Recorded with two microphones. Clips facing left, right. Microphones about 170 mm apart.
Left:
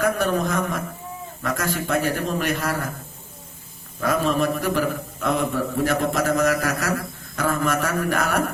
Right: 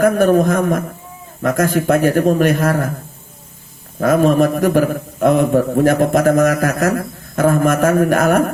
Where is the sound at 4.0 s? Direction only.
50° right (ahead or behind).